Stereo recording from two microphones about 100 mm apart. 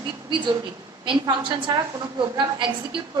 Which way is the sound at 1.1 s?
55° right (ahead or behind).